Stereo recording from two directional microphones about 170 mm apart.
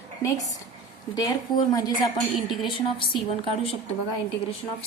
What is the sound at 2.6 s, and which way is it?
Speech, 30° left (ahead or behind).